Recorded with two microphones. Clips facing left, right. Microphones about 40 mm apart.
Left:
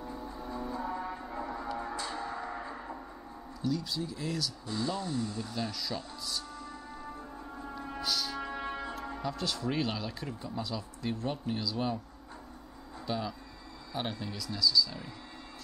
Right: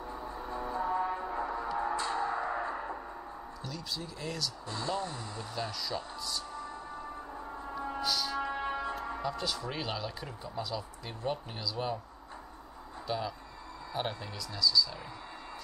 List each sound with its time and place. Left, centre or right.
0.0 s music: centre
3.6 s speech: centre
7.5 s music: centre
9.2 s speech: centre
13.0 s speech: centre